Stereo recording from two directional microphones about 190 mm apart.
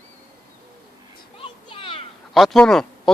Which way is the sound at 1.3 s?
30° left (ahead or behind).